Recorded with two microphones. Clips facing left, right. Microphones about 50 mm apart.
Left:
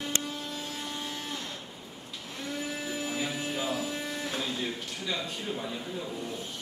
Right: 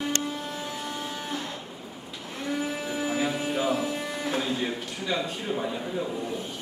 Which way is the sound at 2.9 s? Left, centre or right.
Centre.